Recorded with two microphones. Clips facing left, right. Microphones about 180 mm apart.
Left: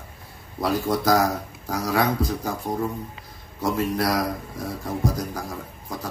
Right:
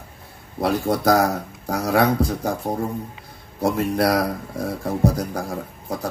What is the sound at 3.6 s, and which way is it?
A man's voice, 65° right (ahead or behind).